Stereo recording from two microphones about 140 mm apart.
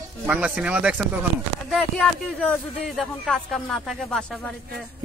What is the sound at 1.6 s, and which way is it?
Speech, 5° left (ahead or behind).